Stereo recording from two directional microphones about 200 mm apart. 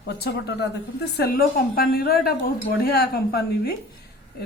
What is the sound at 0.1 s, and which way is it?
A woman's voice, 55° left (ahead or behind).